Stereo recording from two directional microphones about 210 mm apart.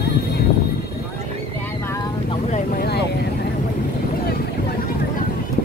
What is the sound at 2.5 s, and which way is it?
Vehicle, 45° left (ahead or behind).